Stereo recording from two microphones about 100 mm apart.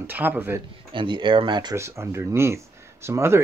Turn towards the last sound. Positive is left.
turn(degrees=-25)  # may be behind; listen again after turning